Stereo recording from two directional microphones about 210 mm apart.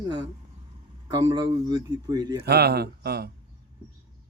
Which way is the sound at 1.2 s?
20° right (ahead or behind).